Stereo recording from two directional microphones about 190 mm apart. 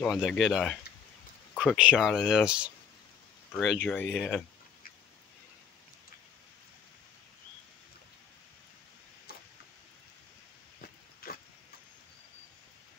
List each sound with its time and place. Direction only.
0.0 s speech: centre (ahead or behind)
1.5 s a sound: 5° left (ahead or behind)
1.8 s speech: 5° right (ahead or behind)
11.2 s pig: 50° left (ahead or behind)